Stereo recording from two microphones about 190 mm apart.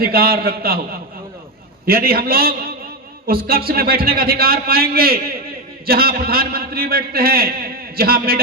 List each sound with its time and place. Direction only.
0.0 s a man's voice: 55° right (ahead or behind)
1.9 s a man's voice: 50° right (ahead or behind)